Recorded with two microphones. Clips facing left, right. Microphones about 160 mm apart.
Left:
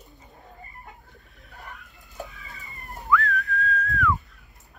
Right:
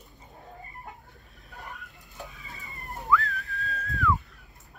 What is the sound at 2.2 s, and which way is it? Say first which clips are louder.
Chicken: left 1 dB; 20° right (ahead or behind).